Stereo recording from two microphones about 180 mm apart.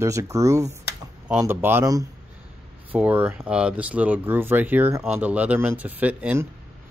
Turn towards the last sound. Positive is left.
turn(degrees=-10)  # may be behind; listen again after turning